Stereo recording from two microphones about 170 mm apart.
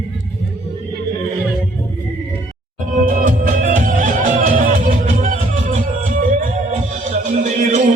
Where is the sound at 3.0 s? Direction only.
50° right (ahead or behind).